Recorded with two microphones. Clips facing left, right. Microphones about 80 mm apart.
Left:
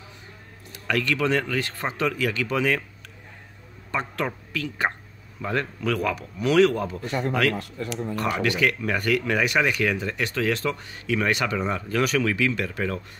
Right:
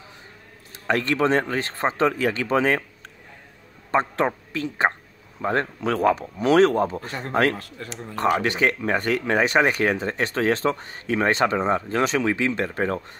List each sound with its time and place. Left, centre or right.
0.8 s speech: right
3.9 s speech: right